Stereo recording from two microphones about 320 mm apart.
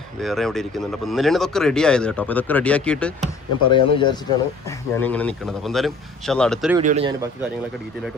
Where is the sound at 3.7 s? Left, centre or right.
Centre.